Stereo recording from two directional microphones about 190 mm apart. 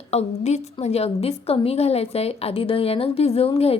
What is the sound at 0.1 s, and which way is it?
A woman's voice, 35° left (ahead or behind).